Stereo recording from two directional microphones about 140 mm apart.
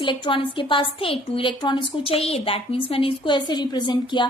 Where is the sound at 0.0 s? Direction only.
35° left (ahead or behind).